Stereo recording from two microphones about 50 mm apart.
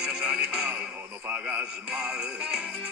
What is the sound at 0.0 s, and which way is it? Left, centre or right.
Music, centre.